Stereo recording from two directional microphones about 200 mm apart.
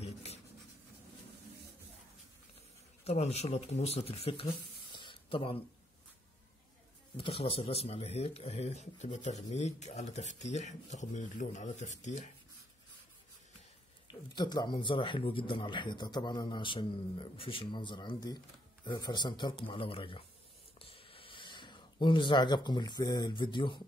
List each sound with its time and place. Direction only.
0.0 s writing: 30° left (ahead or behind)
3.0 s speech: 30° left (ahead or behind)
4.9 s a sound: 25° left (ahead or behind)
7.2 s speech: 30° left (ahead or behind)
14.3 s speech: 20° left (ahead or behind)
20.8 s a sound: 25° left (ahead or behind)